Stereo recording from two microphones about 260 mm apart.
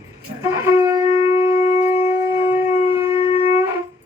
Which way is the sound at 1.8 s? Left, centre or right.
Left.